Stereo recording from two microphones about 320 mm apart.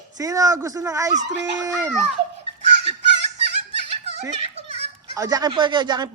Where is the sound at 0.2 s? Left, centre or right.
Centre.